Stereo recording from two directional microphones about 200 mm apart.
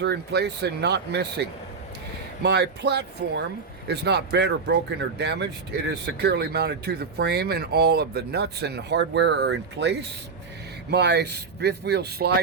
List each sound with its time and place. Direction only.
0.0 s speech: 55° right (ahead or behind)